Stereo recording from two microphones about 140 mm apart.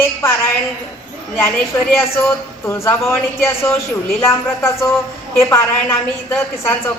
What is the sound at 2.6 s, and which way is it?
A woman's voice, 20° left (ahead or behind).